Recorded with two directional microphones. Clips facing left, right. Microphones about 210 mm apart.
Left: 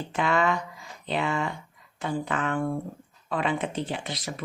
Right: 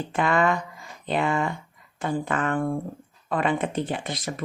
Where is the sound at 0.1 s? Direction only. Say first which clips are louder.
Right 2 dB; 50° right (ahead or behind).